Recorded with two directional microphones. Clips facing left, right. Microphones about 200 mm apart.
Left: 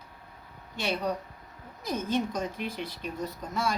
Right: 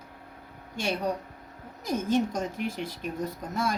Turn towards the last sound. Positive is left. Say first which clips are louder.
# right 1 dB
turn(degrees=-50)  # may be behind; listen again after turning